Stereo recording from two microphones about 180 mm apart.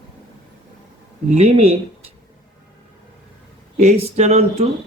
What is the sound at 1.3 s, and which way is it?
Speech, 35° right (ahead or behind).